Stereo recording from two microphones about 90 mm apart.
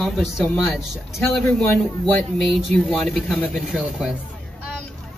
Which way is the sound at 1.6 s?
15° left (ahead or behind).